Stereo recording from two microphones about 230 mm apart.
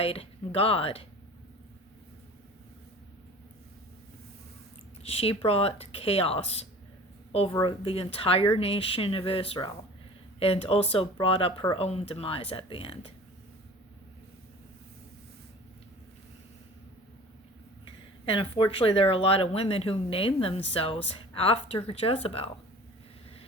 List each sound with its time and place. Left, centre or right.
0.0 s speech: left
5.0 s speech: left
17.8 s speech: left